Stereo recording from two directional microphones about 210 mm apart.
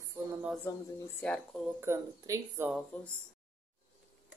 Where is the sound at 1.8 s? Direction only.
10° right (ahead or behind).